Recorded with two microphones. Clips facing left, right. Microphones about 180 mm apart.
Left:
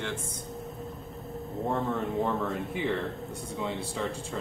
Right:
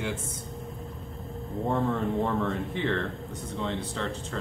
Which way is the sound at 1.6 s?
Centre (ahead or behind).